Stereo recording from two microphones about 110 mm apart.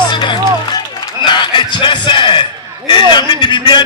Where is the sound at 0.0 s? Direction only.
45° left (ahead or behind).